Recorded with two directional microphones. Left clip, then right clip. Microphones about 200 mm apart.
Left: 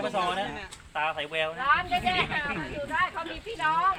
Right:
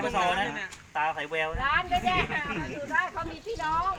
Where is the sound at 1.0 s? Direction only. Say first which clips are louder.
Even; 20° left (ahead or behind).